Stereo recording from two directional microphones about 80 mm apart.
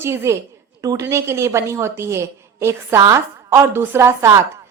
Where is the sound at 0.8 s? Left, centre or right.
Right.